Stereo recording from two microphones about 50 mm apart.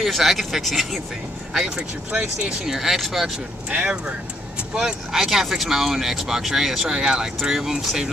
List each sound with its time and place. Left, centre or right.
0.0 s speech: centre
1.5 s speech: centre
3.7 s speech: right
4.7 s speech: centre